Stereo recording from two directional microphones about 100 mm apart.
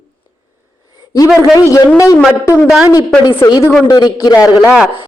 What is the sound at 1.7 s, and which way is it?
Speech, 35° left (ahead or behind).